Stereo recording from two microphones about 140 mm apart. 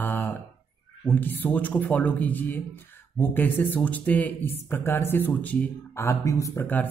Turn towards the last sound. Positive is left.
turn(degrees=15)  # may be behind; listen again after turning